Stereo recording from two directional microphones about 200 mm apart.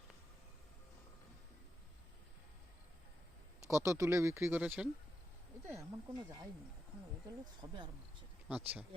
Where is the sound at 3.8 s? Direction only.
15° right (ahead or behind).